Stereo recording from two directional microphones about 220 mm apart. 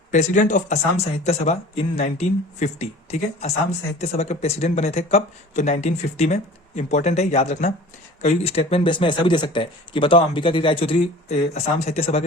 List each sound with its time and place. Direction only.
0.1 s speech: 35° left (ahead or behind)